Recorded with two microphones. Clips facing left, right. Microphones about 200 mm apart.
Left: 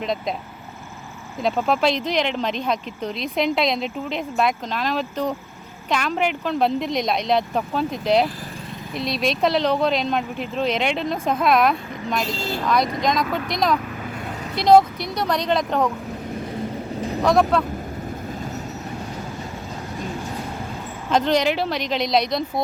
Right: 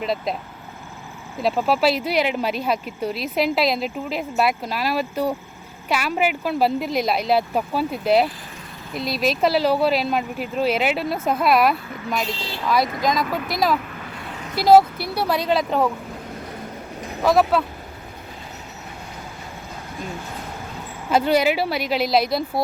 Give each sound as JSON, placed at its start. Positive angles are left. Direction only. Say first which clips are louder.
{"t": 0.0, "sound": "speech", "louder": "right 1 dB", "side_deg": -5}
{"t": 1.4, "sound": "speech", "louder": "right 1 dB", "side_deg": -5}
{"t": 12.4, "sound": "speech", "louder": "left 5 dB", "side_deg": 45}
{"t": 12.6, "sound": "speech", "louder": "right 1 dB", "side_deg": -5}
{"t": 17.2, "sound": "speech", "louder": "right 1 dB", "side_deg": -5}
{"t": 21.1, "sound": "speech", "louder": "right 1 dB", "side_deg": -5}